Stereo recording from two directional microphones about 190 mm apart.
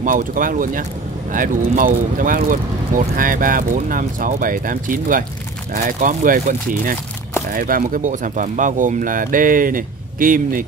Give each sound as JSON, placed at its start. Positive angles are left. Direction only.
{"t": 0.0, "sound": "speech", "side_deg": -45}